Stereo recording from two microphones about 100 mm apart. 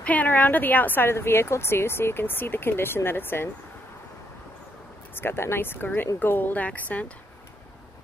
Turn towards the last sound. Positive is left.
turn(degrees=15)  # may be behind; listen again after turning